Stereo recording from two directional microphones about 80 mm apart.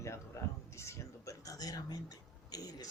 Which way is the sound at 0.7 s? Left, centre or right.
Left.